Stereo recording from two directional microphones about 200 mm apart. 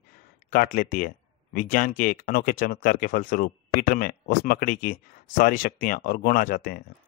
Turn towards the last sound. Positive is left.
turn(degrees=45)  # may be behind; listen again after turning